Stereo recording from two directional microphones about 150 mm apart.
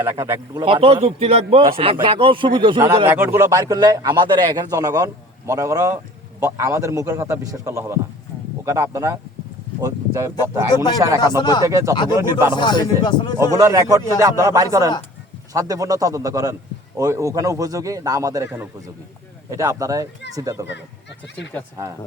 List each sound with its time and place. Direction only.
0.0 s a man's voice: 15° right (ahead or behind)
0.6 s a man's voice: 35° right (ahead or behind)
3.1 s a man's voice: 10° right (ahead or behind)
11.3 s speech: 25° left (ahead or behind)
11.6 s a man's voice: 20° right (ahead or behind)
12.5 s speech: 30° left (ahead or behind)
13.5 s a man's voice: 20° right (ahead or behind)